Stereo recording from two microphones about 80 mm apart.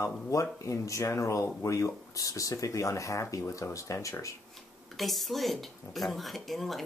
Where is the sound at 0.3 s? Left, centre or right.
Left.